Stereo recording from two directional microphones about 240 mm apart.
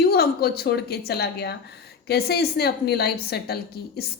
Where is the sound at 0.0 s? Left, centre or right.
Left.